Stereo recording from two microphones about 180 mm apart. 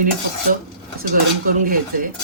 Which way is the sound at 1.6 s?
50° right (ahead or behind).